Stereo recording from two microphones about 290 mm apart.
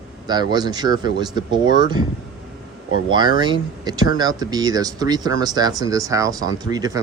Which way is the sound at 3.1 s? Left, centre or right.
Centre.